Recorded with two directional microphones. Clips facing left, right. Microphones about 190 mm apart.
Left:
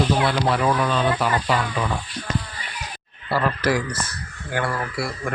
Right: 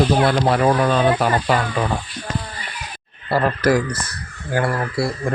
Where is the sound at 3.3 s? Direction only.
45° right (ahead or behind).